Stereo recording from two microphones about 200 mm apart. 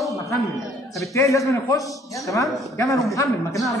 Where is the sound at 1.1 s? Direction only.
15° left (ahead or behind).